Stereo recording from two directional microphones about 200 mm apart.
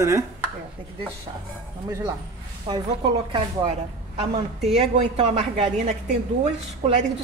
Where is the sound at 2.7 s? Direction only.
20° right (ahead or behind).